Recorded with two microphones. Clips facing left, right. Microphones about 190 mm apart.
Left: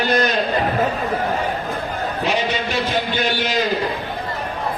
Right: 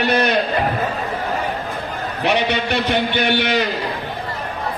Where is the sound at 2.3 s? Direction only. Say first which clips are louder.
Right 4 dB; 65° right (ahead or behind).